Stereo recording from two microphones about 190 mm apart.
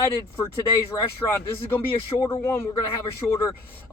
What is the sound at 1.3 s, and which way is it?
Speech, 15° left (ahead or behind).